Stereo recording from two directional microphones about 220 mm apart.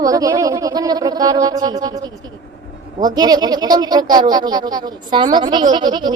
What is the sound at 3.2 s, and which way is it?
Speech, 20° right (ahead or behind).